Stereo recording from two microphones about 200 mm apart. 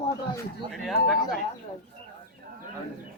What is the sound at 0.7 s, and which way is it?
Speech, centre (ahead or behind).